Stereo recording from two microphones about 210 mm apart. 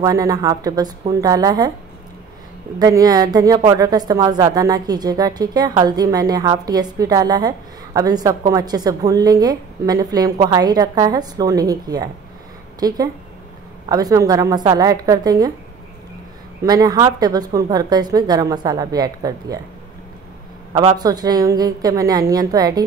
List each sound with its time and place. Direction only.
0.0 s a woman's voice: 15° right (ahead or behind)
2.8 s a woman's voice: 15° right (ahead or behind)
16.6 s speech: 20° right (ahead or behind)
20.7 s a woman's voice: 20° right (ahead or behind)